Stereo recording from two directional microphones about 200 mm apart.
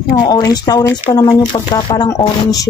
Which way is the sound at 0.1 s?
20° left (ahead or behind).